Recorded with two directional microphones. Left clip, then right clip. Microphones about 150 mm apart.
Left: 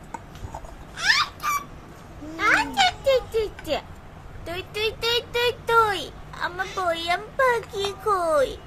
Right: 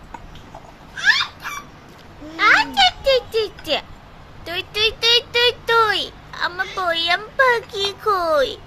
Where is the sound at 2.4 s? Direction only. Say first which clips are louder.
Right 6 dB; 5° left (ahead or behind).